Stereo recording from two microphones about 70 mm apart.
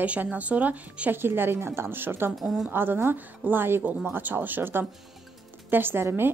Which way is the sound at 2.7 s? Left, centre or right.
Right.